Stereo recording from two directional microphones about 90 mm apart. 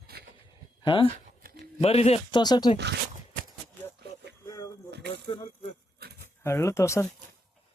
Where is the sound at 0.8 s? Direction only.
75° left (ahead or behind).